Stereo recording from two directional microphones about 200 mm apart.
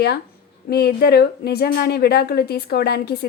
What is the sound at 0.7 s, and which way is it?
A woman's voice, 50° left (ahead or behind).